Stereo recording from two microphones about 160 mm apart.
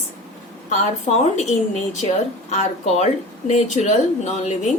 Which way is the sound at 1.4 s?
45° left (ahead or behind).